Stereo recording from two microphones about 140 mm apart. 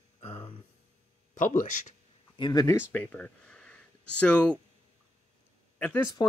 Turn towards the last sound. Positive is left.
turn(degrees=10)  # may be behind; listen again after turning